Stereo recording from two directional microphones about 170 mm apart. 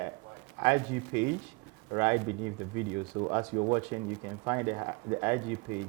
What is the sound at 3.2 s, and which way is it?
Speech, 30° right (ahead or behind).